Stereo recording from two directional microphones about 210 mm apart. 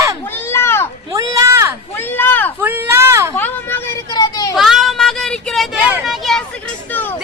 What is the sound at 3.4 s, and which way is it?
Vehicle, 10° left (ahead or behind).